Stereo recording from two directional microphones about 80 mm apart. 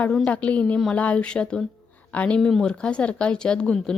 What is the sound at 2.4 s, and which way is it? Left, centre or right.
Speech, centre.